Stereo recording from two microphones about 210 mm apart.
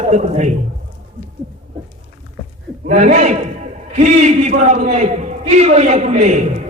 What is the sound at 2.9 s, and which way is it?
A man's voice, 35° right (ahead or behind).